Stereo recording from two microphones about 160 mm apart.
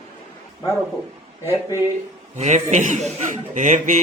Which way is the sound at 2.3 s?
45° right (ahead or behind).